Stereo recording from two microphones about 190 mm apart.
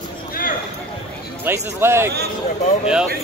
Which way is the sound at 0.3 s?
45° left (ahead or behind).